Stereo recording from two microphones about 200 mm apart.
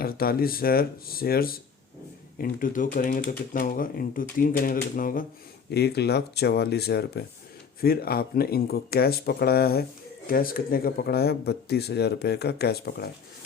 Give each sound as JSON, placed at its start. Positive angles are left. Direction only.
{"t": 0.0, "sound": "speech", "side_deg": 50}